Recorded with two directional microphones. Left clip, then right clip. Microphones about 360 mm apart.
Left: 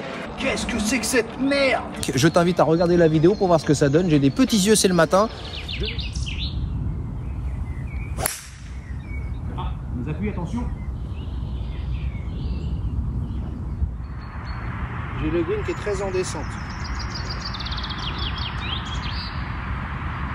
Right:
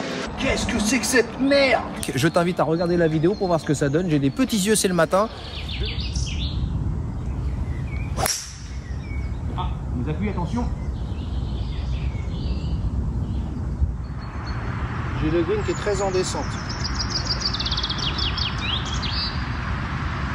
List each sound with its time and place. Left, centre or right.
0.4 s speech: centre
8.2 s whip: centre
10.0 s speech: centre
15.3 s speech: centre
16.8 s a sound: right